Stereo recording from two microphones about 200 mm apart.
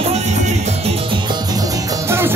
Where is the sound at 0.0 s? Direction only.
35° right (ahead or behind).